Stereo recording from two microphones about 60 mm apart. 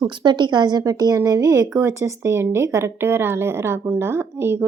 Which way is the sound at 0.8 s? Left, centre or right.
Right.